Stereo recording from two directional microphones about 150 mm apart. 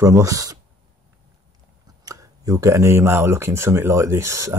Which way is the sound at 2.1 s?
25° right (ahead or behind).